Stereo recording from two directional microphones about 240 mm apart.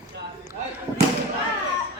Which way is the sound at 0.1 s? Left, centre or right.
Right.